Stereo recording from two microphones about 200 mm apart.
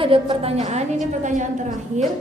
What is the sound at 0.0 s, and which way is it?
A woman's voice, 25° right (ahead or behind).